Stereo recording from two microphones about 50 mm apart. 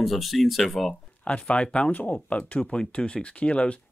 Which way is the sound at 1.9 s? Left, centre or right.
Left.